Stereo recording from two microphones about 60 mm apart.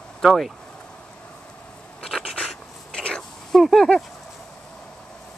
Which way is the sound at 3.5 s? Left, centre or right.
Centre.